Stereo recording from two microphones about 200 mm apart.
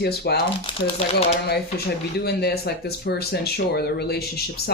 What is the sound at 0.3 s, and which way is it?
Speech, 55° left (ahead or behind).